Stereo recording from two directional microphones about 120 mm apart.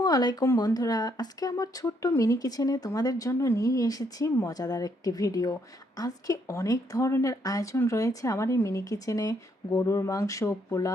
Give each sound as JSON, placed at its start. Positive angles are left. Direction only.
{"t": 0.0, "sound": "speech", "side_deg": 35}